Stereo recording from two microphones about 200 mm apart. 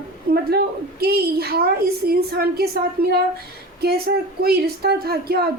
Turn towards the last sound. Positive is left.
turn(degrees=-50)  # may be behind; listen again after turning